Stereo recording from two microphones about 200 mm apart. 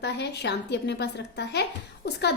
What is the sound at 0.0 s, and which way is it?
A woman's voice, 55° left (ahead or behind).